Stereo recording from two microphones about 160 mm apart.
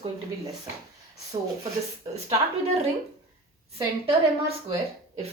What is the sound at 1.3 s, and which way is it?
Speech, 30° right (ahead or behind).